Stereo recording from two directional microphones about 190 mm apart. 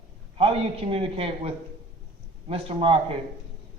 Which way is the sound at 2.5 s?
30° right (ahead or behind).